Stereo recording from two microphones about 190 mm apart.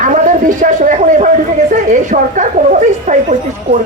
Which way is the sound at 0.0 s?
40° right (ahead or behind).